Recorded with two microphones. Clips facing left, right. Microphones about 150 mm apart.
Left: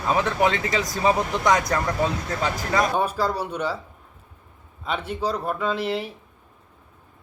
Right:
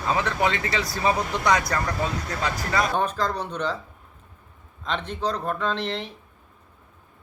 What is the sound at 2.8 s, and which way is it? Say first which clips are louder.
Speech: left 2 dB; 5° left (ahead or behind).